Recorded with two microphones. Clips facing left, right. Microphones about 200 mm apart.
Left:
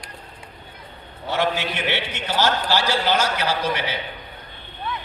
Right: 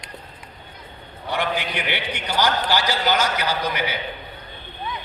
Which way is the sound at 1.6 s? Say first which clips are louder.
Left 2 dB; 25° left (ahead or behind).